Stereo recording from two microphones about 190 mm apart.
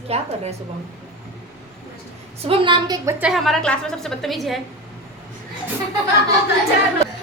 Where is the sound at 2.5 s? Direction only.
25° right (ahead or behind).